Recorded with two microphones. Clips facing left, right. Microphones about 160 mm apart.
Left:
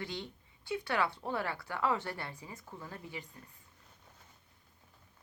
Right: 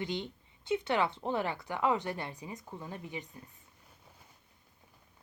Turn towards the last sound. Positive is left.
turn(degrees=-20)  # may be behind; listen again after turning